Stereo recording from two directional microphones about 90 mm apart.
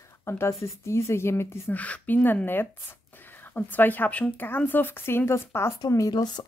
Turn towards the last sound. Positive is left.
turn(degrees=50)  # may be behind; listen again after turning